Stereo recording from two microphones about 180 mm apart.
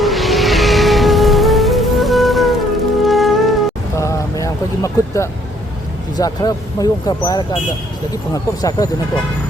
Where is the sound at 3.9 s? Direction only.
15° left (ahead or behind).